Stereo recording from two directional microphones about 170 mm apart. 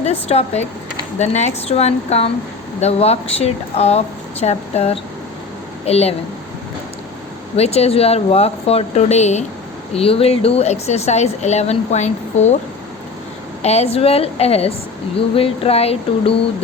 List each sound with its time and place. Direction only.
0.0 s speech: 40° left (ahead or behind)
7.5 s speech: 35° left (ahead or behind)
13.6 s speech: 40° left (ahead or behind)